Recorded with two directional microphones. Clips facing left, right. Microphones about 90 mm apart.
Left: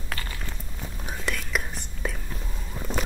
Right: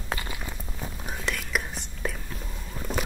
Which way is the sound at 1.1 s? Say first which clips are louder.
Left 1 dB; centre (ahead or behind).